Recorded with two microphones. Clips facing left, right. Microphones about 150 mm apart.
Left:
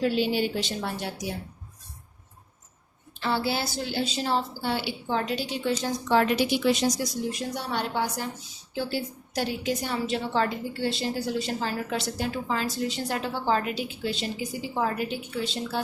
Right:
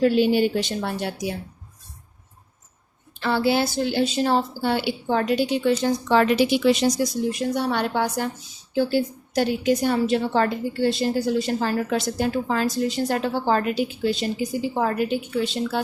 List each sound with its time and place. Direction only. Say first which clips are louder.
0.0 s a woman's voice: right 7 dB; 50° right (ahead or behind)
3.2 s a woman's voice: right 6 dB; 60° right (ahead or behind)